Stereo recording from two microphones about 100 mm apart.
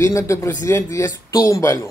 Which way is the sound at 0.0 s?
30° left (ahead or behind).